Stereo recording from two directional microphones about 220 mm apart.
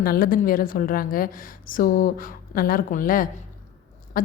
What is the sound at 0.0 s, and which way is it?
A woman's voice, 40° left (ahead or behind).